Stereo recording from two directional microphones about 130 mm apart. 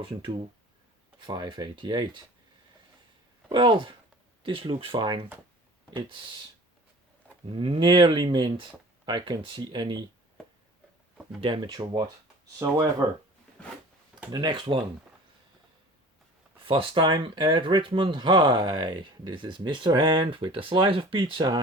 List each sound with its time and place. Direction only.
0.0 s speech: 45° right (ahead or behind)
3.5 s speech: 40° right (ahead or behind)
7.5 s speech: 40° right (ahead or behind)
11.3 s speech: 40° right (ahead or behind)
14.3 s speech: 35° right (ahead or behind)
16.6 s speech: 40° right (ahead or behind)